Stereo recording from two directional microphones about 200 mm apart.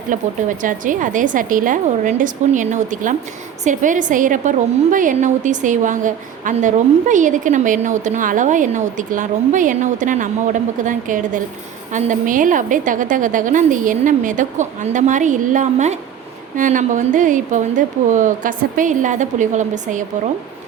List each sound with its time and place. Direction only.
0.1 s a woman's voice: 40° right (ahead or behind)